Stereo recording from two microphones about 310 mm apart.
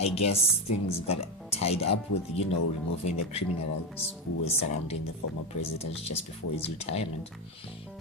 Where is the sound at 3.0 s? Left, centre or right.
Centre.